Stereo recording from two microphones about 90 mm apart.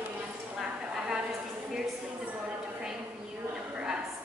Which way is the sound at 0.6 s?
5° right (ahead or behind).